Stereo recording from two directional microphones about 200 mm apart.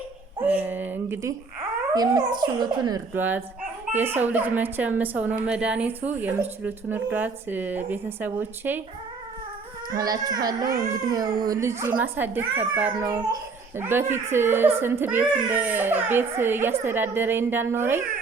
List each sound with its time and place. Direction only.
0.4 s a child's voice: 10° right (ahead or behind)
9.9 s a child's voice: 20° right (ahead or behind)